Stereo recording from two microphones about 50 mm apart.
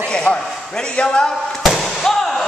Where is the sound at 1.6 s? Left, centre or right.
Centre.